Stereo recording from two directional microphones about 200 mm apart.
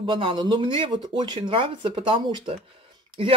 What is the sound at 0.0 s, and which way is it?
Speech, 25° right (ahead or behind).